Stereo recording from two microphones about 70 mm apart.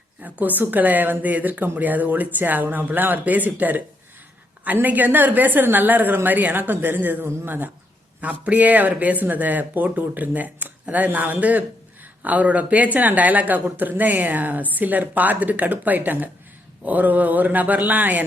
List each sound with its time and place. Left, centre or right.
0.2 s speech: right